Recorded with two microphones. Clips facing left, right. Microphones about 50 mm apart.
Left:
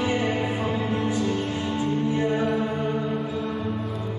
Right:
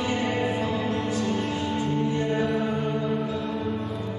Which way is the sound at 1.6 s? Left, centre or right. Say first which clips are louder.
Left 1 dB; centre.